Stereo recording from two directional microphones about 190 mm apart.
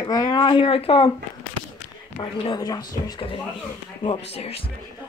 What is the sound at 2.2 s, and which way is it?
Speech, 25° left (ahead or behind).